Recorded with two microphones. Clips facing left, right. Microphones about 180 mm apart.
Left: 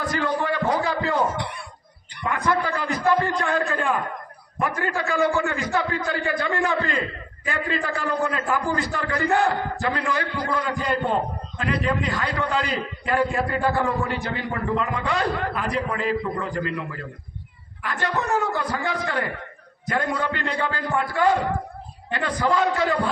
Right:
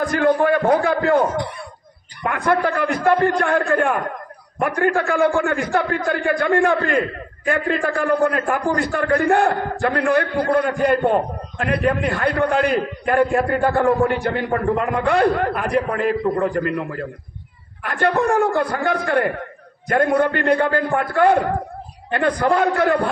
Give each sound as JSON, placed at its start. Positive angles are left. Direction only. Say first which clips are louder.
{"t": 0.0, "sound": "a man's voice", "louder": "right 8 dB", "side_deg": -50}
{"t": 2.2, "sound": "a man's voice", "louder": "right 4 dB", "side_deg": -60}